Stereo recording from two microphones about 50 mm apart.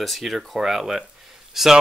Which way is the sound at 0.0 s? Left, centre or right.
Centre.